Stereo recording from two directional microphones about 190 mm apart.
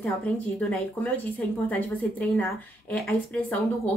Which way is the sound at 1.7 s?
10° left (ahead or behind).